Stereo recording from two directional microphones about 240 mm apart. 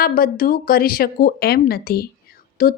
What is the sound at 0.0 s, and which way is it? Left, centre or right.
Speech, left.